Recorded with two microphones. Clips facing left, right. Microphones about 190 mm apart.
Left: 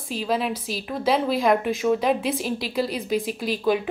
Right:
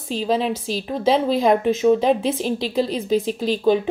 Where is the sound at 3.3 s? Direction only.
5° left (ahead or behind).